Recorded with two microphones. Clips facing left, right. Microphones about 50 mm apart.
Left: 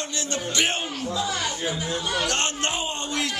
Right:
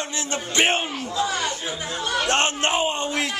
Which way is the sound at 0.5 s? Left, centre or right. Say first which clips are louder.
Right 6 dB; right.